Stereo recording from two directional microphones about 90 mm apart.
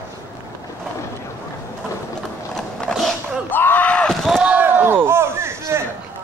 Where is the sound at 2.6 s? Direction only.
5° left (ahead or behind).